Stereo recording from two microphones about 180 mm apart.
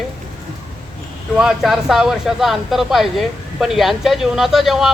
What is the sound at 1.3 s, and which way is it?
Speech, centre (ahead or behind).